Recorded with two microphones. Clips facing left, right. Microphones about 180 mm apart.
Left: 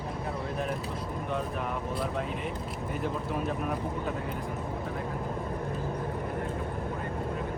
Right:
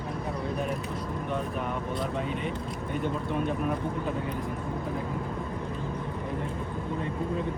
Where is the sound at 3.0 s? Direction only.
Centre (ahead or behind).